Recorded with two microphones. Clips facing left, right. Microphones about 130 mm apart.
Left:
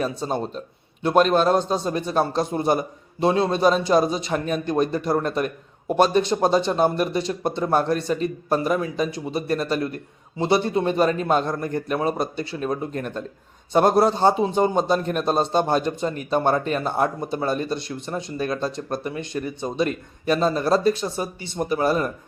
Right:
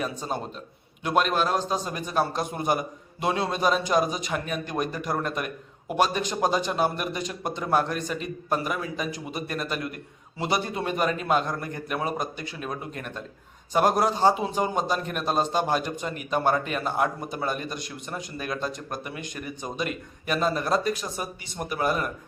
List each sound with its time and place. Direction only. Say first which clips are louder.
0.0 s speech: left 5 dB; 35° left (ahead or behind)